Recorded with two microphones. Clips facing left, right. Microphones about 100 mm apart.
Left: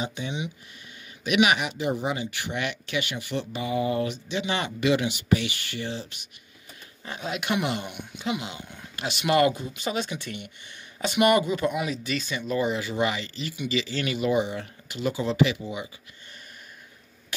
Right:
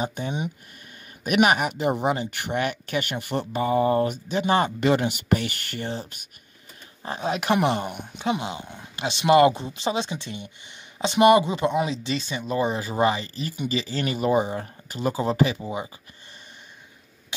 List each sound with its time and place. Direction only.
0.0 s speech: 45° right (ahead or behind)
7.1 s speech: 35° right (ahead or behind)